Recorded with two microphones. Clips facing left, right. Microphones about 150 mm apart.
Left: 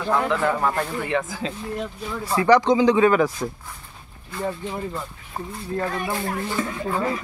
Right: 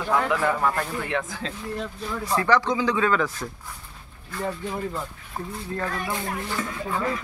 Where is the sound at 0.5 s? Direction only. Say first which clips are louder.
Left 2 dB; 10° left (ahead or behind).